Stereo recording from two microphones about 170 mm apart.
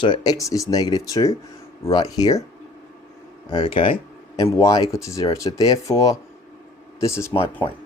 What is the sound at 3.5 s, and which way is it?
Speech, 30° left (ahead or behind).